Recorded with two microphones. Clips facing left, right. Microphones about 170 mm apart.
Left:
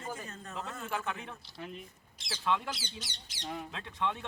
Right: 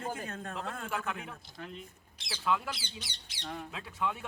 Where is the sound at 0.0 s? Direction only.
55° right (ahead or behind).